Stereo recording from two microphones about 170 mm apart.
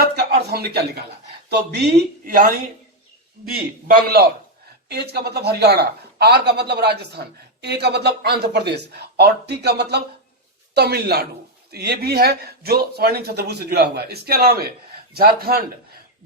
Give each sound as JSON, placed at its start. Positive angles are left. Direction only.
{"t": 0.0, "sound": "a sound", "side_deg": -65}
{"t": 1.5, "sound": "speech", "side_deg": -75}
{"t": 3.8, "sound": "speech", "side_deg": -65}